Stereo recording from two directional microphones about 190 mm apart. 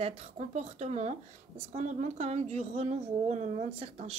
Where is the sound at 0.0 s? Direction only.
35° right (ahead or behind).